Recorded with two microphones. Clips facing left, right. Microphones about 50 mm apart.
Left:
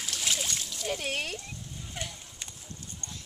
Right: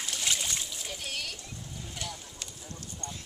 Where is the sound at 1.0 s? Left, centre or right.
Left.